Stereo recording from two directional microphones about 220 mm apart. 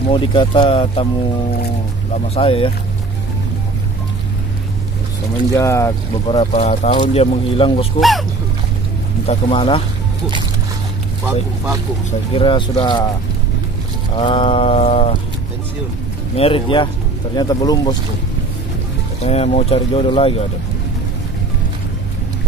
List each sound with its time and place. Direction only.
0.1 s speech: 25° left (ahead or behind)
2.3 s speech: 25° left (ahead or behind)
5.5 s speech: 15° left (ahead or behind)
6.2 s speech: 30° left (ahead or behind)
9.2 s speech: 25° left (ahead or behind)
12.1 s speech: 25° left (ahead or behind)
14.1 s speech: 25° left (ahead or behind)
16.3 s speech: 25° left (ahead or behind)
19.2 s speech: 30° left (ahead or behind)